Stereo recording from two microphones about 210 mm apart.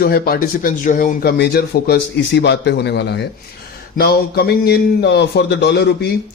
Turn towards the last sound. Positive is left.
turn(degrees=50)  # may be behind; listen again after turning